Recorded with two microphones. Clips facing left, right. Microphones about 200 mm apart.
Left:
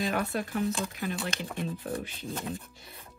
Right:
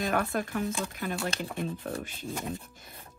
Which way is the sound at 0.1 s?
50° right (ahead or behind).